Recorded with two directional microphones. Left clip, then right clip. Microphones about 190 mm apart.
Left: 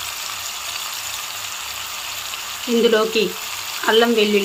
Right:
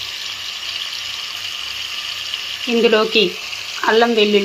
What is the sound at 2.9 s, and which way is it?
Speech, centre (ahead or behind).